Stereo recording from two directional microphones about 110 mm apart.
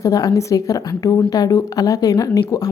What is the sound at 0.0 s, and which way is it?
A woman's voice, 35° left (ahead or behind).